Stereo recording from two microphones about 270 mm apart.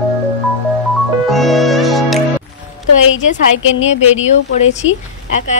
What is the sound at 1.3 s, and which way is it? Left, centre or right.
Music, centre.